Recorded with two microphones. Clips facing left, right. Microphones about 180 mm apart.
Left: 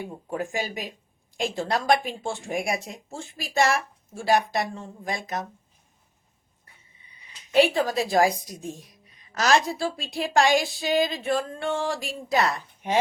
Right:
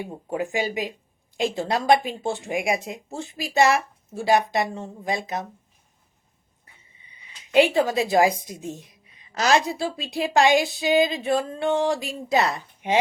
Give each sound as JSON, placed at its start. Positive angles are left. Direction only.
{"t": 0.3, "sound": "speech", "side_deg": -15}
{"t": 7.9, "sound": "speech", "side_deg": -20}